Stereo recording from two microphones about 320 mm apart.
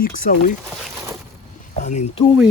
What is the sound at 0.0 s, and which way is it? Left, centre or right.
Speech, left.